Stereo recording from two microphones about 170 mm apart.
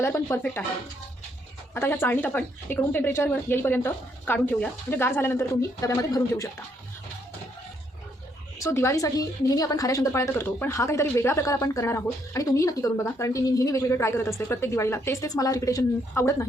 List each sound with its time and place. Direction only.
0.0 s a woman's voice: 15° left (ahead or behind)
1.7 s a woman's voice: 15° left (ahead or behind)
8.5 s a woman's voice: 15° left (ahead or behind)